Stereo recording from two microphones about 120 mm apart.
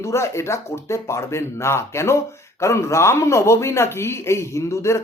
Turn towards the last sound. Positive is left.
turn(degrees=25)  # may be behind; listen again after turning